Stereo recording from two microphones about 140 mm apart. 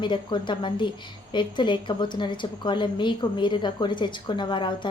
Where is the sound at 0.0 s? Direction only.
35° left (ahead or behind).